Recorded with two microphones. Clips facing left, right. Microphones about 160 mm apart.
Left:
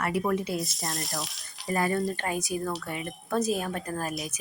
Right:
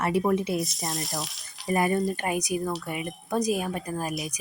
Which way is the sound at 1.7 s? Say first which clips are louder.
Right 3 dB; 20° right (ahead or behind).